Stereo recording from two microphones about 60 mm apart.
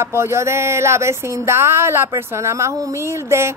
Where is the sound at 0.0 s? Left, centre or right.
Right.